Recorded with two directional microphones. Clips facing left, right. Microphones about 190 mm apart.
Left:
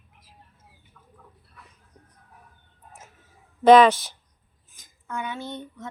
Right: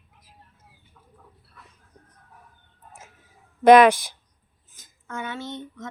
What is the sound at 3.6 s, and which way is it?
Speech, 10° right (ahead or behind).